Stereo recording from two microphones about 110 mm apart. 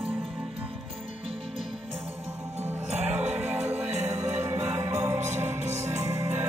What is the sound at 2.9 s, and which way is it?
Music, 80° right.